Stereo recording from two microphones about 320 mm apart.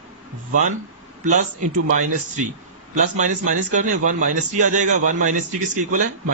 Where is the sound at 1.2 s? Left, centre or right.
Right.